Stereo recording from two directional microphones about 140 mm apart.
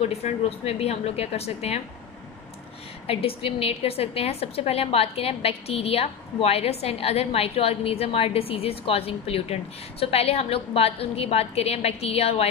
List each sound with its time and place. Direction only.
0.0 s a woman's voice: 50° left (ahead or behind)
3.1 s a woman's voice: 45° left (ahead or behind)